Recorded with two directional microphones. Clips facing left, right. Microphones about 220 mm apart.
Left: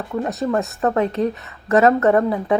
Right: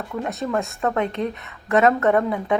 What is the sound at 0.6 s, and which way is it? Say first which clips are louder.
Speech: left 4 dB; centre (ahead or behind).